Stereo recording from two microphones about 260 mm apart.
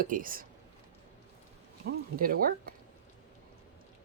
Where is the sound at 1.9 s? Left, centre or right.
Right.